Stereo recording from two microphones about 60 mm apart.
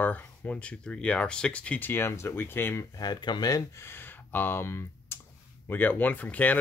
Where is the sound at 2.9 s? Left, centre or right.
Left.